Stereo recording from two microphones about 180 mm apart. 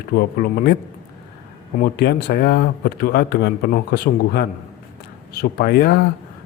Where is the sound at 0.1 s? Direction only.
60° left (ahead or behind).